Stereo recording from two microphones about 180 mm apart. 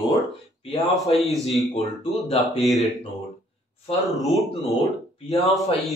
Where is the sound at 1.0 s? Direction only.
35° left (ahead or behind).